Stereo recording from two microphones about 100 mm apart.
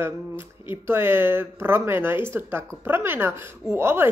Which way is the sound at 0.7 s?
25° right (ahead or behind).